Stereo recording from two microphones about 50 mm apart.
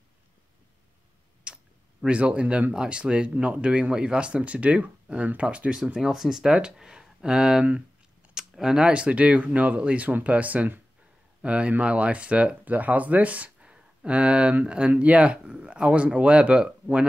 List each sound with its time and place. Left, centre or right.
1.4 s clicking: centre
2.7 s speech: centre
5.9 s speech: centre